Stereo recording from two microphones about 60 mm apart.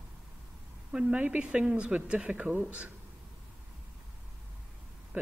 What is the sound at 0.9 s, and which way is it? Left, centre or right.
Speech, centre.